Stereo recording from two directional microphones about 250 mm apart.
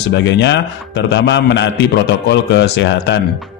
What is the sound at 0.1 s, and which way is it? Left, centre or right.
A man's voice, left.